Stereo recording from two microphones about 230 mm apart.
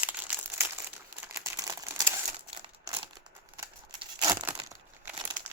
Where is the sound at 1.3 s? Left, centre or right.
Centre.